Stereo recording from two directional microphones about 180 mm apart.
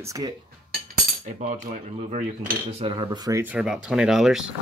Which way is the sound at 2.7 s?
30° right (ahead or behind).